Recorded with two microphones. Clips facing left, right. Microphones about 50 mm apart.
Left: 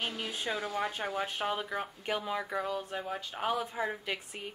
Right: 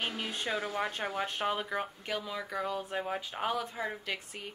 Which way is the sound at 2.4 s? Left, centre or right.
Centre.